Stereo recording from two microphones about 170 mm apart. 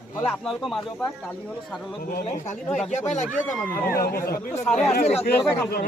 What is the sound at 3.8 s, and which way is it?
Speech, 60° left (ahead or behind).